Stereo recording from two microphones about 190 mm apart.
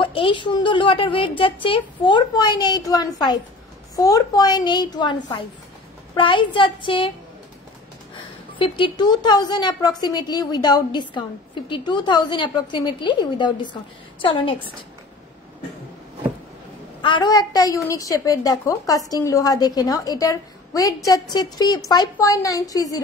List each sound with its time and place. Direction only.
0.0 s a woman's voice: 25° left (ahead or behind)
8.5 s a woman's voice: 25° left (ahead or behind)
17.0 s a woman's voice: 25° left (ahead or behind)